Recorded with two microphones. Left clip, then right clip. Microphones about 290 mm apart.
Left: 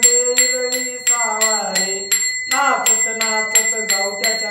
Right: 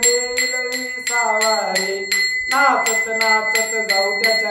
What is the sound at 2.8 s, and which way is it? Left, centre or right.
Music, centre.